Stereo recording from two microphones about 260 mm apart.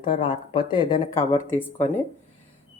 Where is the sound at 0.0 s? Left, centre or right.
Centre.